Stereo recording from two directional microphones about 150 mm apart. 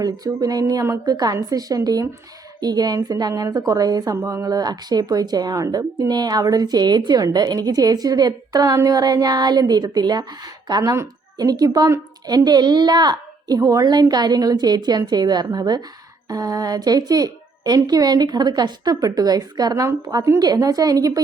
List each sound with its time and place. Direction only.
0.0 s a woman's voice: 25° right (ahead or behind)